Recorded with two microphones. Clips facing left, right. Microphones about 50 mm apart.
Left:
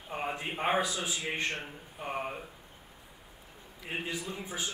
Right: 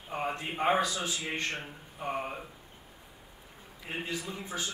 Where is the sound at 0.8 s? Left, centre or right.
Centre.